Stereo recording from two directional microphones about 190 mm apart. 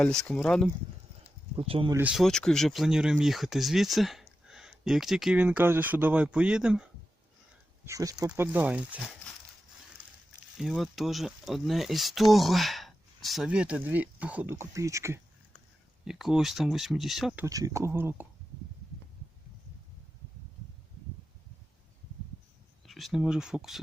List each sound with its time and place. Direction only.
0.0 s speech: 5° left (ahead or behind)
1.5 s speech: 30° right (ahead or behind)
1.9 s speech: 10° right (ahead or behind)
7.9 s speech: 15° right (ahead or behind)
10.6 s speech: centre (ahead or behind)
16.0 s speech: centre (ahead or behind)
17.4 s speech: 15° right (ahead or behind)
22.9 s speech: centre (ahead or behind)